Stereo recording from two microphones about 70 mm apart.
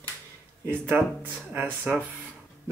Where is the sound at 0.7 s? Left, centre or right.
Right.